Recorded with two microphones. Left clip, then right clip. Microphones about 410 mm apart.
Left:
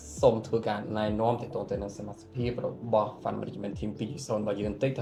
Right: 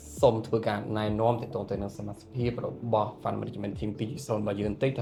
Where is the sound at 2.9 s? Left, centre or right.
Right.